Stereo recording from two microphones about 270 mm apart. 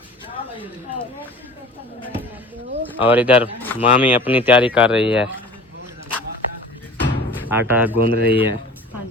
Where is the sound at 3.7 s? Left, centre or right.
Left.